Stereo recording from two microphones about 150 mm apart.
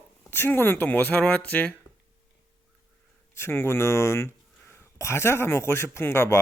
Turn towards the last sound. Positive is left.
turn(degrees=15)  # may be behind; listen again after turning